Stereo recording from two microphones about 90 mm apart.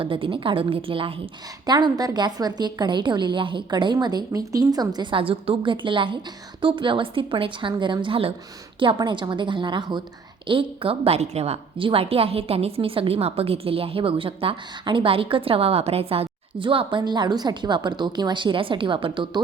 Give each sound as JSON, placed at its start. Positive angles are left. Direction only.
{"t": 0.0, "sound": "a woman's voice", "side_deg": -70}
{"t": 1.6, "sound": "a woman's voice", "side_deg": -50}
{"t": 4.3, "sound": "a woman's voice", "side_deg": -40}
{"t": 5.1, "sound": "a woman's voice", "side_deg": -90}
{"t": 8.0, "sound": "a woman's voice", "side_deg": -90}
{"t": 8.8, "sound": "a woman's voice", "side_deg": -65}
{"t": 10.4, "sound": "a woman's voice", "side_deg": -75}
{"t": 17.0, "sound": "a woman's voice", "side_deg": -50}